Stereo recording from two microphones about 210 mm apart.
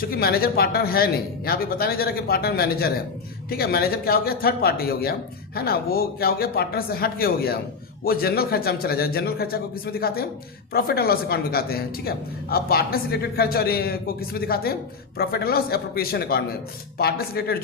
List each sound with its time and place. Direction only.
0.0 s speech: 45° left (ahead or behind)